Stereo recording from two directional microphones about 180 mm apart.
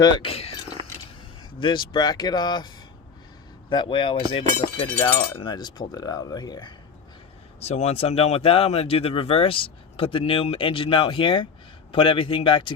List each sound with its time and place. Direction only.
0.0 s a sound: 30° left (ahead or behind)
1.6 s speech: 25° left (ahead or behind)
4.9 s speech: 10° left (ahead or behind)
5.4 s speech: 25° left (ahead or behind)
7.6 s speech: 35° left (ahead or behind)